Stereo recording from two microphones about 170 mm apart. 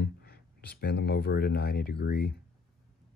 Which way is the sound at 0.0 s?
70° left (ahead or behind).